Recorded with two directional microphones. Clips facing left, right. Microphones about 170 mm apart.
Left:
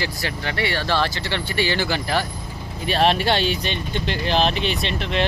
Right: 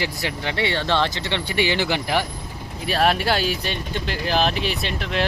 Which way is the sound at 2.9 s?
Centre (ahead or behind).